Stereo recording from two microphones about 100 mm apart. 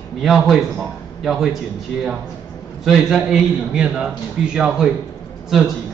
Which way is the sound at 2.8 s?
5° right (ahead or behind).